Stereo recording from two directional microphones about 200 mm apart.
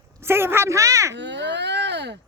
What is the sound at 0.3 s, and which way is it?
Speech, 10° right (ahead or behind).